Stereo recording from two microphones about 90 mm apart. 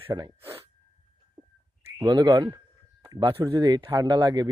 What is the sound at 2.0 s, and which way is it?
Speech, 50° right (ahead or behind).